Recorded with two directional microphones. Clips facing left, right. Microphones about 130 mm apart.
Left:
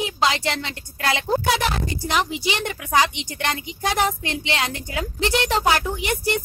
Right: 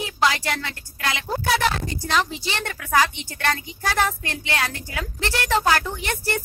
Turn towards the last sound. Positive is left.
turn(degrees=15)  # may be behind; listen again after turning